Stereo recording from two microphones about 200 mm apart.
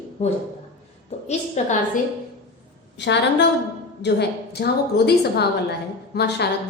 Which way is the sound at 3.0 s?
60° left (ahead or behind).